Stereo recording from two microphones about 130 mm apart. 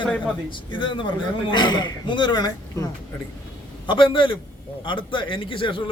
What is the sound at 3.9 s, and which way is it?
A man's voice, 40° left (ahead or behind).